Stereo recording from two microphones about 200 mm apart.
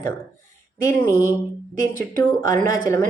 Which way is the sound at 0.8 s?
15° left (ahead or behind).